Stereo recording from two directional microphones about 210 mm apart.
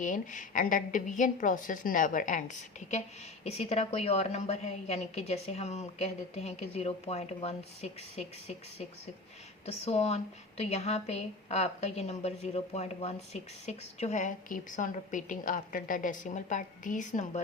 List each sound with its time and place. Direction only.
0.0 s a woman's voice: 40° left (ahead or behind)
9.6 s a woman's voice: 30° left (ahead or behind)